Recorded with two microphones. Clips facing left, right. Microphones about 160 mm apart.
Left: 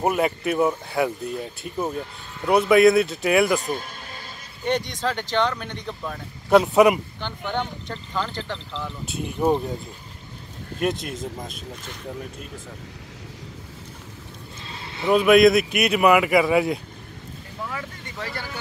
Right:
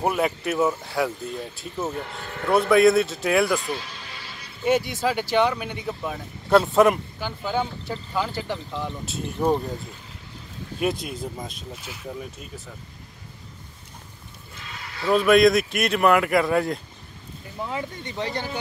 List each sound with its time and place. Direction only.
0.0 s speech: 5° left (ahead or behind)
2.0 s speech: 65° right (ahead or behind)
2.7 s speech: centre (ahead or behind)
3.5 s music: 45° left (ahead or behind)
4.6 s speech: 5° right (ahead or behind)
9.0 s speech: centre (ahead or behind)
10.8 s speech: centre (ahead or behind)
14.6 s a sound: 30° left (ahead or behind)
15.1 s speech: centre (ahead or behind)
17.6 s speech: 20° right (ahead or behind)